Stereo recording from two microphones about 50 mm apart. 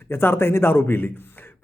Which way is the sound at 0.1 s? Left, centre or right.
Left.